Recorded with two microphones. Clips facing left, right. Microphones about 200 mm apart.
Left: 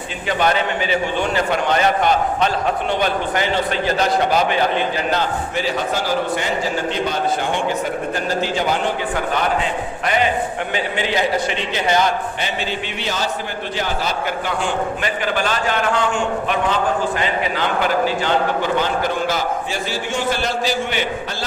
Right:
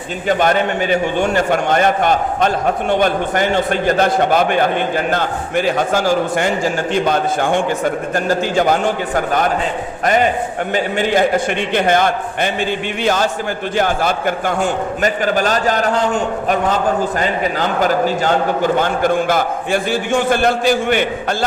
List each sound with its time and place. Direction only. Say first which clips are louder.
0.3 s a man's voice: right 4 dB; 50° right (ahead or behind)
10.8 s a man's voice: right 6 dB; 45° right (ahead or behind)